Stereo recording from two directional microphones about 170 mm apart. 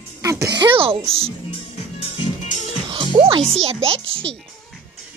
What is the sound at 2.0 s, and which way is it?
Music, 45° left (ahead or behind).